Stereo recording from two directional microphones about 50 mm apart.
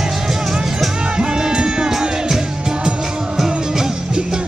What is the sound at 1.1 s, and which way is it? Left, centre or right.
Music, centre.